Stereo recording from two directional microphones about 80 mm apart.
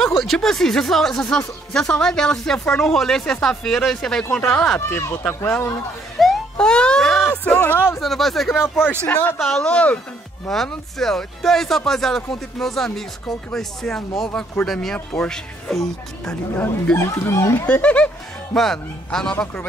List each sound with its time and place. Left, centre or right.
0.2 s speech: centre
4.7 s speech: left
6.2 s music: centre
6.6 s speech: centre
8.0 s speech: centre
9.0 s speech: centre
16.9 s speech: left
17.6 s speech: centre